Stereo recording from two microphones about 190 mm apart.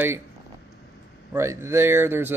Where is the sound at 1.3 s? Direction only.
15° right (ahead or behind).